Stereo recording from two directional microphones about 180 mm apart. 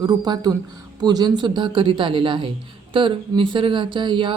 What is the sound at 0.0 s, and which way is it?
Speech, 25° right (ahead or behind).